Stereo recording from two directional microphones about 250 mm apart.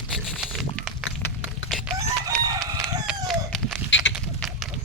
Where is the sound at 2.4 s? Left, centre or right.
Centre.